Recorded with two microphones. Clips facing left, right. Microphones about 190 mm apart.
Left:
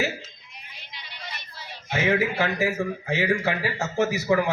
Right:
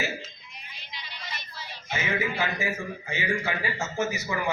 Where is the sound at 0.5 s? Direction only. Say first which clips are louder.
Right 1 dB; 55° left (ahead or behind).